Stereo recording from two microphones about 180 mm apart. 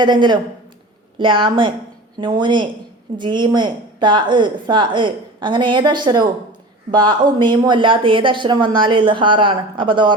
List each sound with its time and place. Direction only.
0.0 s a woman's voice: 25° right (ahead or behind)